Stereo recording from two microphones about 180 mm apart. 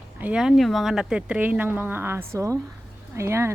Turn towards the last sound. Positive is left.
turn(degrees=-15)  # may be behind; listen again after turning